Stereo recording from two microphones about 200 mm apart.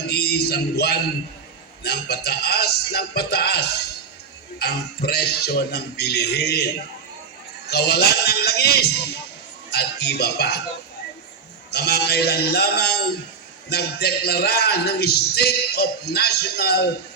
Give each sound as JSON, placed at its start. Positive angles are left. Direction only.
{"t": 0.1, "sound": "a sound", "side_deg": 55}
{"t": 1.8, "sound": "a man's voice", "side_deg": 55}
{"t": 7.7, "sound": "a man's voice", "side_deg": 55}
{"t": 11.7, "sound": "a man's voice", "side_deg": 55}